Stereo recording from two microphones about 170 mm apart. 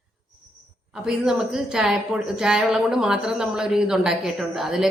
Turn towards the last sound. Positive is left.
turn(degrees=0)  # may be behind; listen again after turning